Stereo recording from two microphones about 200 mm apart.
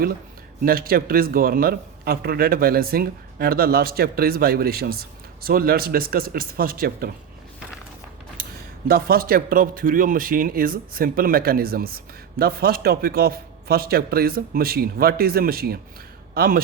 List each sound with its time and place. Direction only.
0.6 s a man's voice: 45° right (ahead or behind)
8.9 s a man's voice: 50° right (ahead or behind)